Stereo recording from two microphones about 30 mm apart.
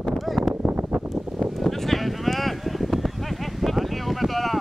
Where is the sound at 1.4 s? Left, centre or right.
Centre.